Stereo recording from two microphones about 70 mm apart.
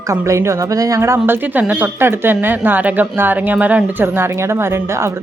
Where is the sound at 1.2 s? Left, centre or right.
Right.